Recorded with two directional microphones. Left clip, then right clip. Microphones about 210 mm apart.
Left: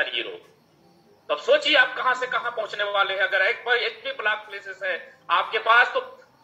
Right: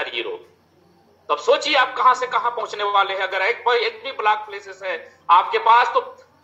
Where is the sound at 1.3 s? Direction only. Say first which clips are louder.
Right 2 dB; 45° right (ahead or behind).